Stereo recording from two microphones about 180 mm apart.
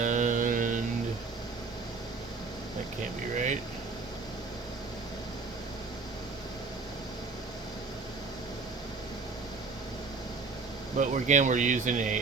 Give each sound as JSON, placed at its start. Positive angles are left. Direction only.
{"t": 0.0, "sound": "mantra", "side_deg": -45}
{"t": 3.3, "sound": "a sound", "side_deg": -40}
{"t": 10.9, "sound": "speech", "side_deg": -40}